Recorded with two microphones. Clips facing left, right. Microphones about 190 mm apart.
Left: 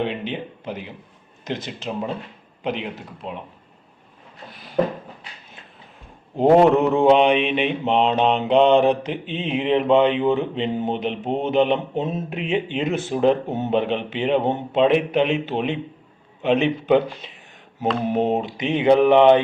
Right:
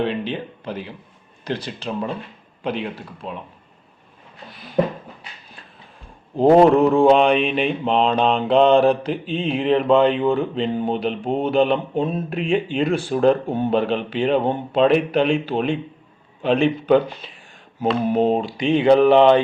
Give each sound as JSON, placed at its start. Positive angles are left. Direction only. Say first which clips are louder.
{"t": 0.0, "sound": "speech", "louder": "right 2 dB", "side_deg": 20}
{"t": 6.3, "sound": "speech", "louder": "right 2 dB", "side_deg": 20}
{"t": 18.1, "sound": "speech", "louder": "right 2 dB", "side_deg": 20}